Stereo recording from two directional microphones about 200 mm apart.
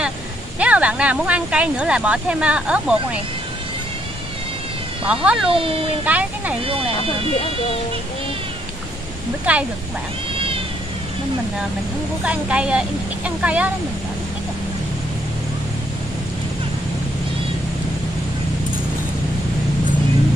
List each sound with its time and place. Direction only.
0.6 s speech: 5° right (ahead or behind)
5.0 s speech: 5° right (ahead or behind)
9.5 s speech: 10° right (ahead or behind)
10.3 s cat: 25° right (ahead or behind)
12.3 s speech: 5° right (ahead or behind)